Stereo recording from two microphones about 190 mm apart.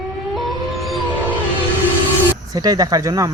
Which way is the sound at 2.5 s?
20° right (ahead or behind).